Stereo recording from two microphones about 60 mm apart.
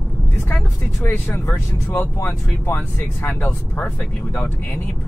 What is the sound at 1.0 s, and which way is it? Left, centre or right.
Speech, left.